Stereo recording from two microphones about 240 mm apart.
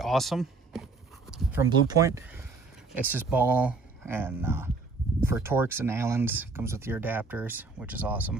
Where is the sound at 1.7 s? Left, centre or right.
Centre.